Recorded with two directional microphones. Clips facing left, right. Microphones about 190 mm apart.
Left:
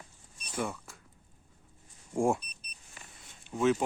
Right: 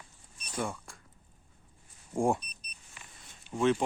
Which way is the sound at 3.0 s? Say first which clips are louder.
Left 1 dB; 40° left (ahead or behind).